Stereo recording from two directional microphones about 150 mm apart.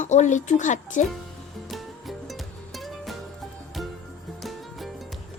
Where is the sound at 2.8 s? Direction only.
Centre (ahead or behind).